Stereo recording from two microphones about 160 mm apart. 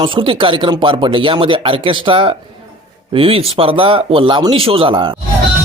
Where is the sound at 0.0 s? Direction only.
30° right (ahead or behind).